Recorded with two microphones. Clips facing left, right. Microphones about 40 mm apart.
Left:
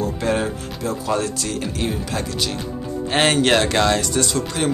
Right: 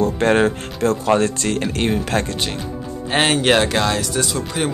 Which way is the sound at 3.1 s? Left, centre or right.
Centre.